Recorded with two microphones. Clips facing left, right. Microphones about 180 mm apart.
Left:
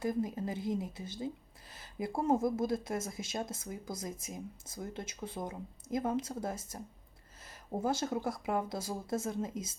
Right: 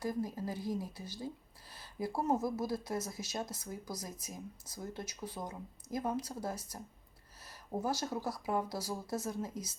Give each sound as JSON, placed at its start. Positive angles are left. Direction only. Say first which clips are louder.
{"t": 0.0, "sound": "speech", "louder": "left 3 dB", "side_deg": 20}